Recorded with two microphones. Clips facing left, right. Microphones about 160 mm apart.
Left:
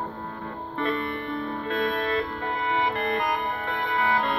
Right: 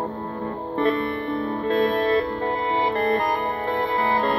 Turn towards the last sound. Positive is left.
turn(degrees=-35)  # may be behind; listen again after turning